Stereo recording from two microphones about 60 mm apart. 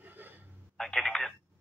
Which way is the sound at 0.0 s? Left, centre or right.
Right.